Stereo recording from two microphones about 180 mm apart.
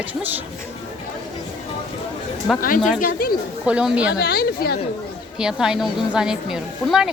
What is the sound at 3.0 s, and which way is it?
Speech, 55° left (ahead or behind).